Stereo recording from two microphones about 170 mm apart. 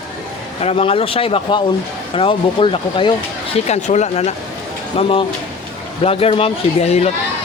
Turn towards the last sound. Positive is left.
turn(degrees=40)  # may be behind; listen again after turning